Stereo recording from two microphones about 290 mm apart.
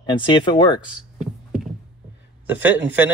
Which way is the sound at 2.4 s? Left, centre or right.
Centre.